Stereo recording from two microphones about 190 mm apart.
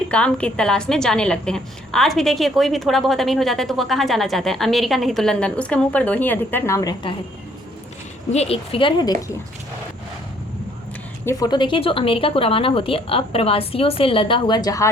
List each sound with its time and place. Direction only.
0.1 s a woman's voice: 5° left (ahead or behind); by 7.2 s 25° left (ahead or behind)
8.3 s speech: 35° left (ahead or behind)
11.3 s speech: 20° left (ahead or behind)